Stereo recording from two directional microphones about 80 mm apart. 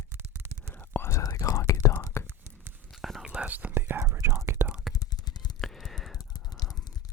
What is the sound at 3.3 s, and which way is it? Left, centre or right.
Whispering, centre.